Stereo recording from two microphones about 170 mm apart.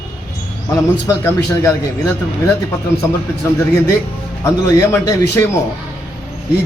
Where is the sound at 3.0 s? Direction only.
15° left (ahead or behind).